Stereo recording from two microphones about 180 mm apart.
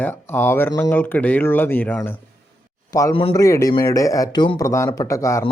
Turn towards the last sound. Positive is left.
turn(degrees=15)  # may be behind; listen again after turning